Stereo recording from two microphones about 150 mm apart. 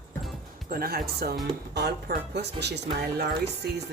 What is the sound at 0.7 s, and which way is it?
Speech, 80° right.